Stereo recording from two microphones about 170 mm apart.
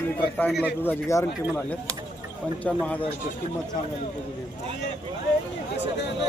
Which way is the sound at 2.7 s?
10° left (ahead or behind).